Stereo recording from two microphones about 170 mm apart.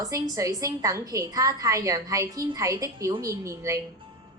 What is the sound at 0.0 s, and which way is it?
A woman's voice, 20° right (ahead or behind).